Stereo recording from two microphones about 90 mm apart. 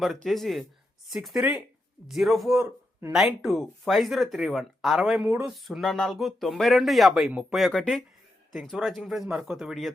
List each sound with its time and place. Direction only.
0.2 s speech: centre (ahead or behind)